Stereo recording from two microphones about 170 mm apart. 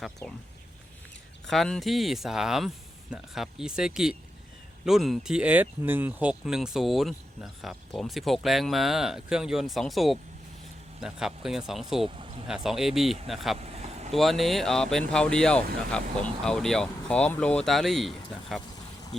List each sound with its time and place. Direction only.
0.2 s speech: 10° left (ahead or behind)
1.5 s speech: centre (ahead or behind)
12.0 s a sound: 35° right (ahead or behind)
12.5 s speech: centre (ahead or behind)
13.6 s vehicle: 40° right (ahead or behind)
14.1 s speech: centre (ahead or behind)